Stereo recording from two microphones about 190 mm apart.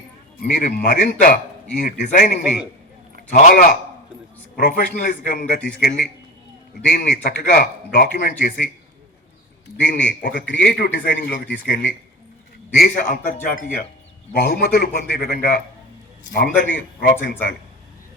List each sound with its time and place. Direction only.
0.3 s a man's voice: 55° left (ahead or behind)
9.7 s a man's voice: 60° left (ahead or behind)
10.3 s a man's voice: 50° left (ahead or behind)